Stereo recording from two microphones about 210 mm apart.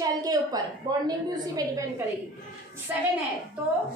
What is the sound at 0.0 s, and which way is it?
A woman's voice, 15° right (ahead or behind).